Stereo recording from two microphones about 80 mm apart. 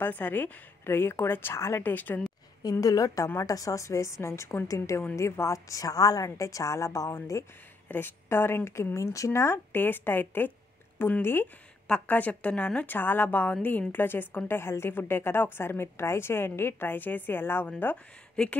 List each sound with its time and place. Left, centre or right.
0.0 s a woman's voice: left
2.7 s a woman's voice: left
4.6 s a woman's voice: left
18.3 s speech: centre